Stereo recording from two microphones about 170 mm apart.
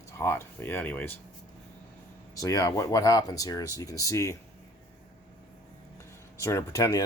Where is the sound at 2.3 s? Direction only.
20° left (ahead or behind).